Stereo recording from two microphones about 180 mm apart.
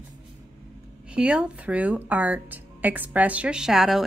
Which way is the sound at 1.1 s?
5° right (ahead or behind).